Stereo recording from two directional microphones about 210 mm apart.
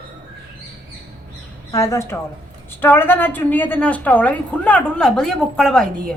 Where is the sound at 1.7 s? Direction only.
15° left (ahead or behind).